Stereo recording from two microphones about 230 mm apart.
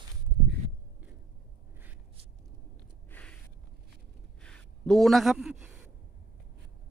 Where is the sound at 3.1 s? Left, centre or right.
Centre.